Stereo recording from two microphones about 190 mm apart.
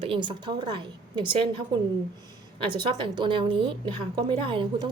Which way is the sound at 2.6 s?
25° right (ahead or behind).